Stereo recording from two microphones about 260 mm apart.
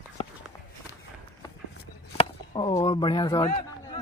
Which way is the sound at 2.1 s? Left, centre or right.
Centre.